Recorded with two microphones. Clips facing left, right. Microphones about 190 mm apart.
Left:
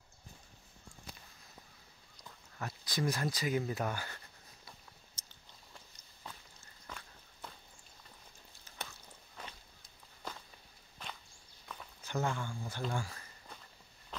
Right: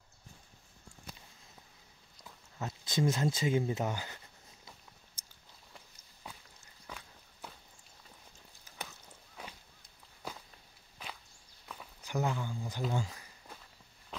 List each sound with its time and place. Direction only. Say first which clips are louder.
2.6 s speech: right 4 dB; 25° right (ahead or behind)
5.2 s chewing: left 1 dB; 10° right (ahead or behind)
6.2 s walk: right 1 dB; 10° right (ahead or behind)
8.6 s a sound: right 1 dB; 10° right (ahead or behind)
11.6 s walk: right 1 dB; 5° right (ahead or behind)
12.0 s speech: right 2 dB; 15° right (ahead or behind)